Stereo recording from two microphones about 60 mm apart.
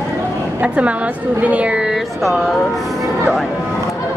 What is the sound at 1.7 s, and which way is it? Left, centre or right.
Speech, centre.